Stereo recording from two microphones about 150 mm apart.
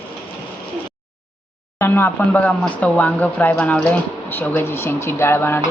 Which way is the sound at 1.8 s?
15° left (ahead or behind).